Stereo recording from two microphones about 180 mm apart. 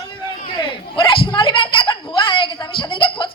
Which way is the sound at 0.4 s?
30° left (ahead or behind).